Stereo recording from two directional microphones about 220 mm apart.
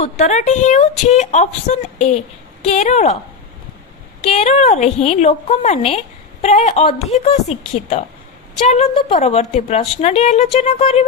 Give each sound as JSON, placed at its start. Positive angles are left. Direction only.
{"t": 0.0, "sound": "a woman's voice", "side_deg": 35}
{"t": 4.3, "sound": "a woman's voice", "side_deg": 30}